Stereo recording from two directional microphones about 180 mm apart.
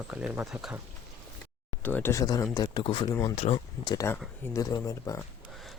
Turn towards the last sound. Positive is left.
turn(degrees=20)  # may be behind; listen again after turning